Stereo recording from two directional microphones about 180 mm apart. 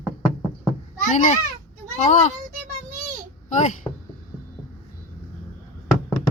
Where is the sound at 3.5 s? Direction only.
40° left (ahead or behind).